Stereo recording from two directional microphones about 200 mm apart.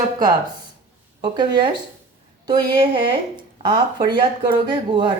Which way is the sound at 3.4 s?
20° right (ahead or behind).